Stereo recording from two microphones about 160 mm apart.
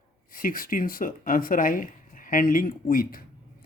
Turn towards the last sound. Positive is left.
turn(degrees=60)  # may be behind; listen again after turning